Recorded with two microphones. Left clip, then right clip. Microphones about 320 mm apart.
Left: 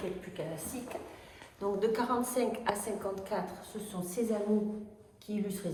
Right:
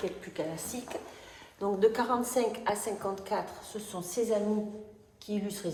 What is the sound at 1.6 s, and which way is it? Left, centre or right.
A woman's voice, right.